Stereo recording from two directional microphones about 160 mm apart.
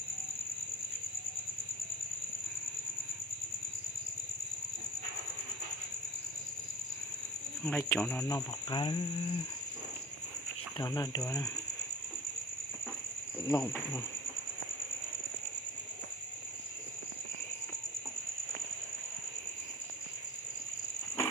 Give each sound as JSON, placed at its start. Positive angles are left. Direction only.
{"t": 7.6, "sound": "speech", "side_deg": 15}
{"t": 8.3, "sound": "speech", "side_deg": 25}
{"t": 10.8, "sound": "speech", "side_deg": 25}
{"t": 13.4, "sound": "speech", "side_deg": 20}